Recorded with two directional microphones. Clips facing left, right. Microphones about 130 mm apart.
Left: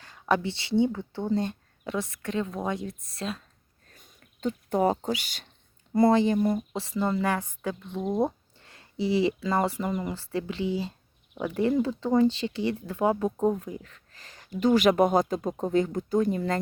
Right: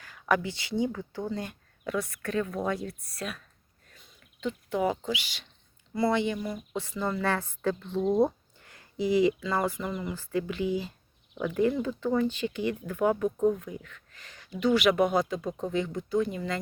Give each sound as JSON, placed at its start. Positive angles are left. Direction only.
{"t": 0.0, "sound": "speech", "side_deg": 30}
{"t": 3.9, "sound": "speech", "side_deg": 45}
{"t": 7.0, "sound": "speech", "side_deg": 20}
{"t": 8.2, "sound": "speech", "side_deg": 25}